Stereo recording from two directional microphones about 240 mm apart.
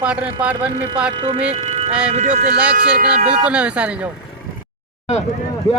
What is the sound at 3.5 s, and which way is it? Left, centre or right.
Speech, centre.